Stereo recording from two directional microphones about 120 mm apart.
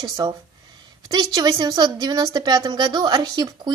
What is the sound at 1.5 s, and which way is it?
A woman's voice, 35° right (ahead or behind).